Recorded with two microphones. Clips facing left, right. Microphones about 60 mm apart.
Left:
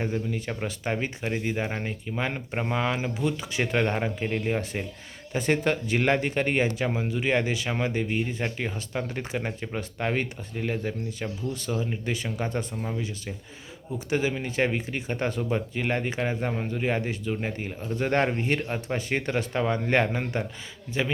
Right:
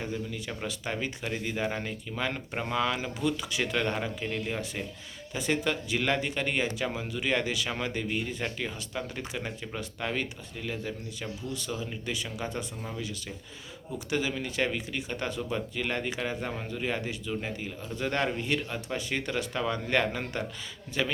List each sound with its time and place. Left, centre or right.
0.0 s speech: left
0.6 s speech: left
12.8 s speech: left